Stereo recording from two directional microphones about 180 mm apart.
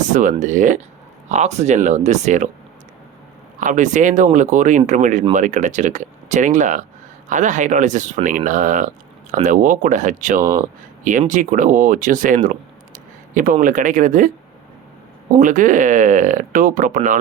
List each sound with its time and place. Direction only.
0.0 s speech: 45° right (ahead or behind)
3.6 s speech: 45° right (ahead or behind)
15.4 s speech: 45° right (ahead or behind)